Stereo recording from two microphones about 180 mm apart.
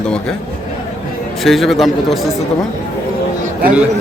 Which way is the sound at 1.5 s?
Centre (ahead or behind).